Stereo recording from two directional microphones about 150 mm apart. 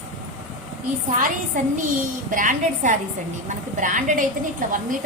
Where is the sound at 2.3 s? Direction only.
60° right (ahead or behind).